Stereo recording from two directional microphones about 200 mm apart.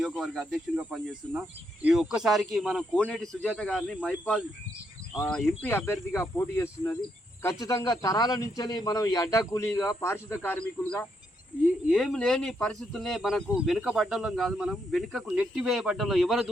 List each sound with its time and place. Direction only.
0.0 s a man's voice: 5° right (ahead or behind)